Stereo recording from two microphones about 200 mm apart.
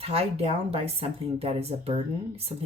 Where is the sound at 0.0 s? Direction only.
30° right (ahead or behind).